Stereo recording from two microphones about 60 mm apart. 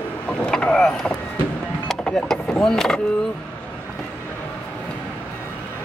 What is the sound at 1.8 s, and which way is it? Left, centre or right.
Speech, centre.